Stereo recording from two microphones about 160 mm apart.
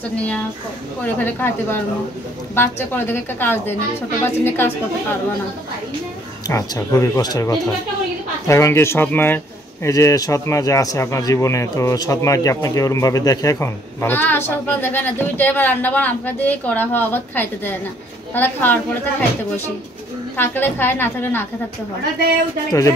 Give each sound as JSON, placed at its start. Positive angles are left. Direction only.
{"t": 0.1, "sound": "a man's voice", "side_deg": 10}
{"t": 6.4, "sound": "a man's voice", "side_deg": 20}
{"t": 20.3, "sound": "a man's voice", "side_deg": 15}
{"t": 22.7, "sound": "speech", "side_deg": 20}